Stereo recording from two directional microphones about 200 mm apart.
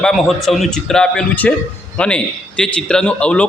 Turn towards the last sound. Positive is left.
turn(degrees=5)  # may be behind; listen again after turning